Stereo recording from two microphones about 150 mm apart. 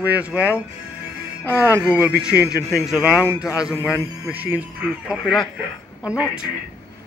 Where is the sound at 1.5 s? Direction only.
15° left (ahead or behind).